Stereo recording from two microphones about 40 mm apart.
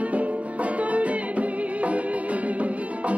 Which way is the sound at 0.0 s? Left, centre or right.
Right.